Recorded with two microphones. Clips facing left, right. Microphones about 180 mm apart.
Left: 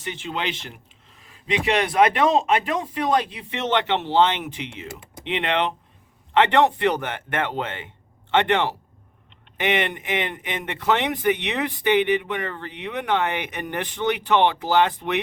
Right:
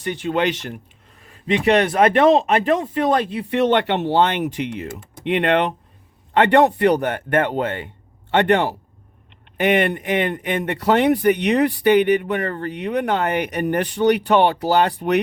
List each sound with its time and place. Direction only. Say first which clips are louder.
0.0 s speech: right 8 dB; 50° right (ahead or behind)